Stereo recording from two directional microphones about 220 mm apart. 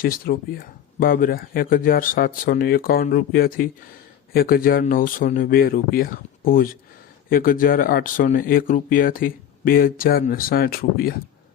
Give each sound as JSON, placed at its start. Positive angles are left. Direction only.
{"t": 0.0, "sound": "speech", "side_deg": 40}